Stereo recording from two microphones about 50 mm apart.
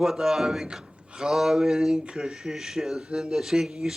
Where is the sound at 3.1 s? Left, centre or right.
Centre.